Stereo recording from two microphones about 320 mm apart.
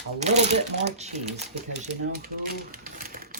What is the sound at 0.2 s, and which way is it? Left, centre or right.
Speech, right.